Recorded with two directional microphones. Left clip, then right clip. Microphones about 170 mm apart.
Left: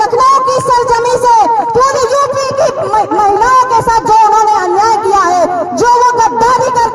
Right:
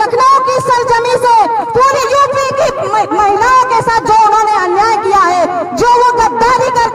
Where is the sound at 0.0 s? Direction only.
20° left (ahead or behind).